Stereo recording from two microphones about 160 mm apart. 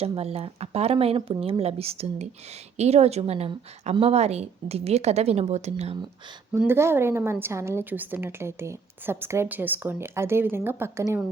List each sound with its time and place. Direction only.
0.0 s a woman's voice: 40° right (ahead or behind)
6.6 s a woman's voice: 15° right (ahead or behind)